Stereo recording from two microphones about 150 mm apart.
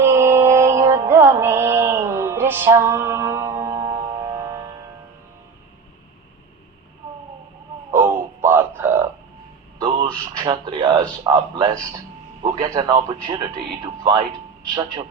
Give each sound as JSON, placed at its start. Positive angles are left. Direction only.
{"t": 0.0, "sound": "music", "side_deg": -15}
{"t": 7.9, "sound": "wail", "side_deg": -15}
{"t": 9.7, "sound": "a sound", "side_deg": -30}
{"t": 11.2, "sound": "a man's voice", "side_deg": -30}